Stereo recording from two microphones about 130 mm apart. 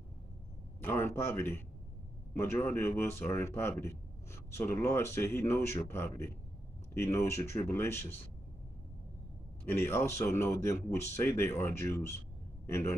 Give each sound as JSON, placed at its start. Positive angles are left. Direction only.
{"t": 0.7, "sound": "speech", "side_deg": 20}
{"t": 9.7, "sound": "speech", "side_deg": 15}